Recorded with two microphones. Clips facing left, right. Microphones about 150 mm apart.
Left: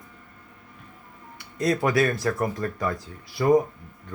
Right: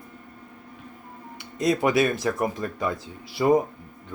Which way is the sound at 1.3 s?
20° right (ahead or behind).